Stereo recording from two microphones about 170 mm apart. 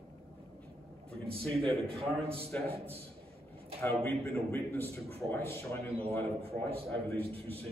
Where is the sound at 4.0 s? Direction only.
15° left (ahead or behind).